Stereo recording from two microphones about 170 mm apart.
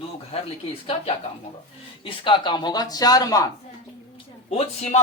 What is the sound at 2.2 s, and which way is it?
Speech, 30° left (ahead or behind).